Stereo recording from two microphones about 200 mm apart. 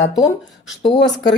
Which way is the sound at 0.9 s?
60° left (ahead or behind).